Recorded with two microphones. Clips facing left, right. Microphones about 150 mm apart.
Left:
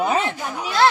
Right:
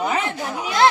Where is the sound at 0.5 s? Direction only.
20° right (ahead or behind).